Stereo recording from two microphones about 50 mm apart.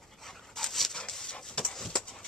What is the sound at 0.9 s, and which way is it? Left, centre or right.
Dog, centre.